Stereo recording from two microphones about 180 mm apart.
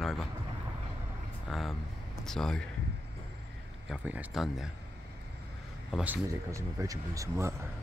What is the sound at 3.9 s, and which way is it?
Speech, 10° right (ahead or behind).